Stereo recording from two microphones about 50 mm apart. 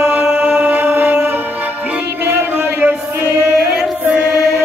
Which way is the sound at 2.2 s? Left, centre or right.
Right.